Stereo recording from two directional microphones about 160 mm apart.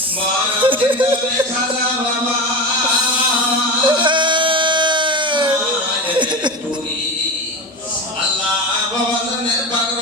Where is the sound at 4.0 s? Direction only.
30° right (ahead or behind).